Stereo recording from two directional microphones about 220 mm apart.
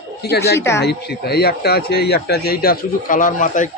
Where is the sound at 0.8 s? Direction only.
45° left (ahead or behind).